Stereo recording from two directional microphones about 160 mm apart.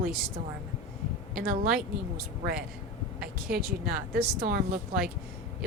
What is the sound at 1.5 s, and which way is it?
Speech, 70° right (ahead or behind).